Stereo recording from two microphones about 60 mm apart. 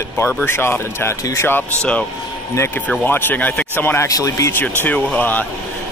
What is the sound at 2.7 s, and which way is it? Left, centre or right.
A man's voice, left.